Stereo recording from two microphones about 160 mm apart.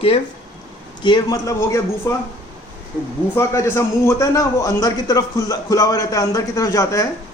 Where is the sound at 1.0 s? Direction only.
25° left (ahead or behind).